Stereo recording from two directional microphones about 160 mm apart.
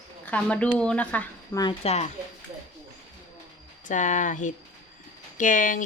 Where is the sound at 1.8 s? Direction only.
40° left (ahead or behind).